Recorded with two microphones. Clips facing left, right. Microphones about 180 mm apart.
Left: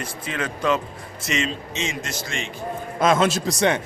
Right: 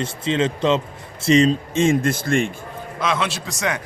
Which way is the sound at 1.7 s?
50° right (ahead or behind).